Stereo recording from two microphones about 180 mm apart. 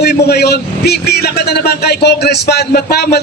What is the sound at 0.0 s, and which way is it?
A man's voice, 60° left (ahead or behind).